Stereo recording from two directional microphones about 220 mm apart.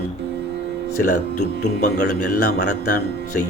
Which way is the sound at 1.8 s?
40° left (ahead or behind).